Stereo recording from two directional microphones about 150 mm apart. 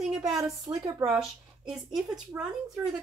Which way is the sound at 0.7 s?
25° right (ahead or behind).